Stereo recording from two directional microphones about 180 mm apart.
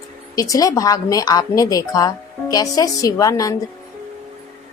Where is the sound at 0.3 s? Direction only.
20° left (ahead or behind).